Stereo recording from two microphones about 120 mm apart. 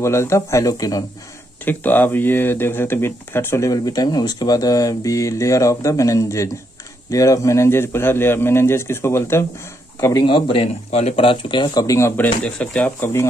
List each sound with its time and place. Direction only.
0.0 s speech: 25° left (ahead or behind)
1.6 s speech: 15° left (ahead or behind)
10.2 s speech: 45° left (ahead or behind)
11.8 s speech: 25° left (ahead or behind)
12.4 s speech: 10° left (ahead or behind)